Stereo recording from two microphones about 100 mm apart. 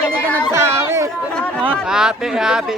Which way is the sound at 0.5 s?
25° right (ahead or behind).